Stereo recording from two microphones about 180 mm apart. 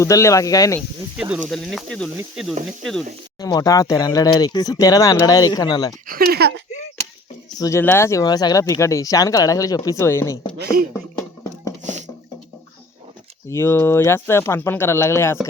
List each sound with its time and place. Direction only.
0.0 s speech: 15° left (ahead or behind)
1.5 s speech: centre (ahead or behind)
3.4 s speech: 20° left (ahead or behind)
6.1 s speech: 55° right (ahead or behind)
7.6 s speech: 15° left (ahead or behind)
10.6 s speech: 55° right (ahead or behind)
11.1 s music: 20° left (ahead or behind)
11.8 s a sound: 40° right (ahead or behind)
13.5 s speech: 15° left (ahead or behind)